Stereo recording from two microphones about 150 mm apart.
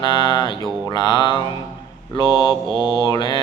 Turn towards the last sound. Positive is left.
turn(degrees=30)  # may be behind; listen again after turning